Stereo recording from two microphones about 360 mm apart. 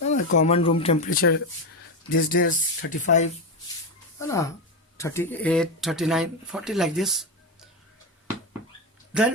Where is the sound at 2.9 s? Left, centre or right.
Centre.